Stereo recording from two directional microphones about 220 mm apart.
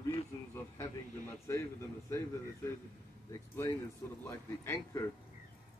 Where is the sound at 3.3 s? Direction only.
15° left (ahead or behind).